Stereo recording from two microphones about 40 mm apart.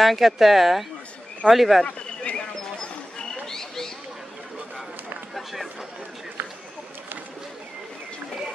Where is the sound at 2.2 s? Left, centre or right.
Left.